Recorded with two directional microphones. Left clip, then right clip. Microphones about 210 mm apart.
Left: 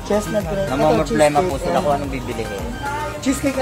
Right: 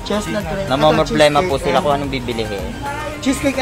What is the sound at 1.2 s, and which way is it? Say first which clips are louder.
Speech: right 2 dB; 40° right (ahead or behind).